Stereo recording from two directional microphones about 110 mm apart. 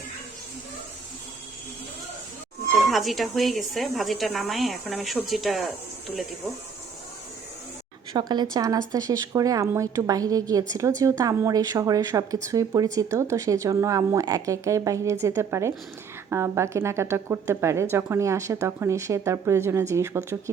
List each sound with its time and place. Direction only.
2.9 s a woman's voice: centre (ahead or behind)
8.1 s a woman's voice: 40° right (ahead or behind)